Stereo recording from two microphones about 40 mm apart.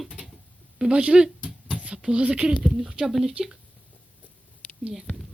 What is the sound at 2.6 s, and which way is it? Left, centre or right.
Speech, centre.